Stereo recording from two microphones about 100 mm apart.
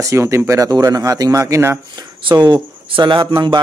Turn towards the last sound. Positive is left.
turn(degrees=-50)  # may be behind; listen again after turning